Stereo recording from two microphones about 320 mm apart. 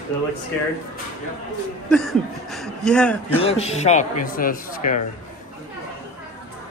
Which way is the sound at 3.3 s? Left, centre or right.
Centre.